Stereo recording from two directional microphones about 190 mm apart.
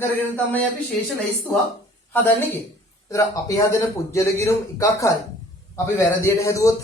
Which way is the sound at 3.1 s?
15° left (ahead or behind).